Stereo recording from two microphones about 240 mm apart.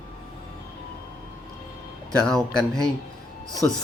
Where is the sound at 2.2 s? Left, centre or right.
Centre.